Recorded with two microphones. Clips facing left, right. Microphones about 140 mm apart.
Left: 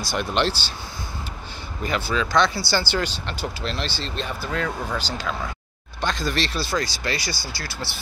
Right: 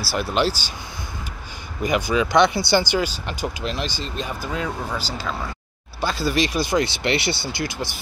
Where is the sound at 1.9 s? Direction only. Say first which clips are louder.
Right 4 dB; 15° right (ahead or behind).